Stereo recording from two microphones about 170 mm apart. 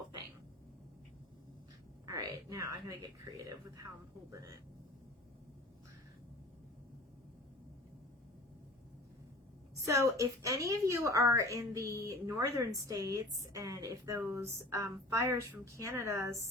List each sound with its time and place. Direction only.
2.0 s a woman's voice: 20° right (ahead or behind)
4.3 s a woman's voice: 20° right (ahead or behind)
9.8 s a woman's voice: 20° right (ahead or behind)